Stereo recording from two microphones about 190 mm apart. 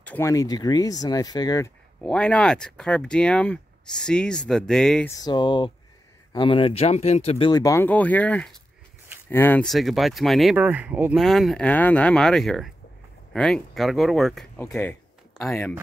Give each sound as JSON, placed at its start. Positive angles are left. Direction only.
{"t": 0.0, "sound": "speech", "side_deg": 10}
{"t": 2.0, "sound": "speech", "side_deg": 5}
{"t": 5.2, "sound": "speech", "side_deg": 25}